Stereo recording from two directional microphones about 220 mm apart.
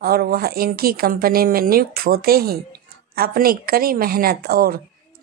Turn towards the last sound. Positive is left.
turn(degrees=-40)  # may be behind; listen again after turning